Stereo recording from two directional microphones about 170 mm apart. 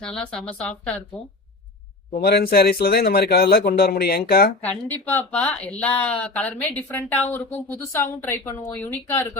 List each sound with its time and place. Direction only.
0.0 s a woman's voice: 5° left (ahead or behind)
2.1 s speech: 65° left (ahead or behind)
4.6 s speech: 10° left (ahead or behind)